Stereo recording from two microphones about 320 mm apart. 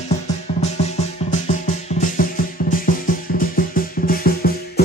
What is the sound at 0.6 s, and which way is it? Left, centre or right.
Music, centre.